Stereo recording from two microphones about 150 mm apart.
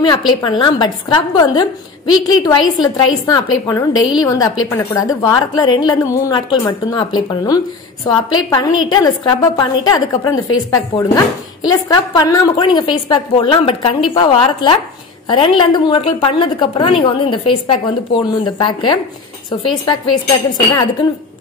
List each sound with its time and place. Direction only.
0.3 s a woman's voice: 25° left (ahead or behind)
8.1 s a woman's voice: 30° left (ahead or behind)